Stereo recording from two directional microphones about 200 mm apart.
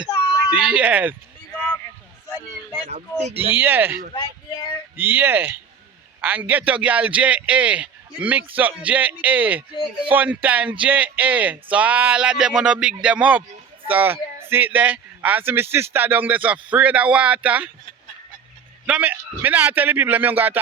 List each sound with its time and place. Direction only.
0.5 s speech: 5° right (ahead or behind)
1.5 s a sound: 5° left (ahead or behind)
2.8 s speech: 35° right (ahead or behind)
3.5 s speech: 10° right (ahead or behind)
4.9 s speech: 10° right (ahead or behind)
18.9 s speech: 10° right (ahead or behind)